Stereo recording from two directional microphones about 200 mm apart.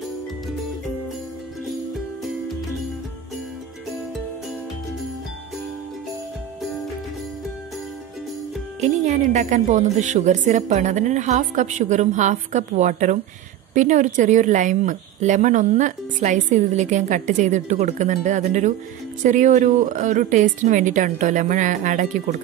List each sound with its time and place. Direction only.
8.8 s speech: 35° right (ahead or behind)